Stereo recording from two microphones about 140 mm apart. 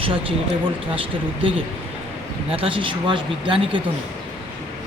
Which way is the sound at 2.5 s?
40° right (ahead or behind).